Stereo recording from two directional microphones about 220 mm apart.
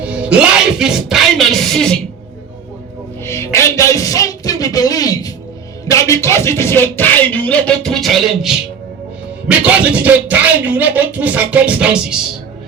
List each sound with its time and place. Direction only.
0.0 s music: 5° right (ahead or behind)
3.2 s speech: 10° left (ahead or behind); by 12.1 s 5° right (ahead or behind)